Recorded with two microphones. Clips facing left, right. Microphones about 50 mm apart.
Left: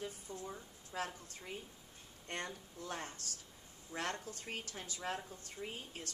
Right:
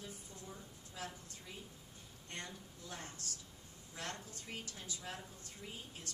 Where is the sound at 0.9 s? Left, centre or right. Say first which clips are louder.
Left 6 dB; left.